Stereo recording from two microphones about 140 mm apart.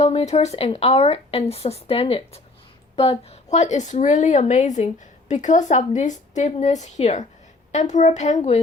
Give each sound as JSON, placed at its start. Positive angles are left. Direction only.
{"t": 0.0, "sound": "a woman's voice", "side_deg": 50}